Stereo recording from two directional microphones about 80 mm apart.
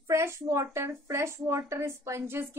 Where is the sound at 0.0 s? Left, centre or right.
Right.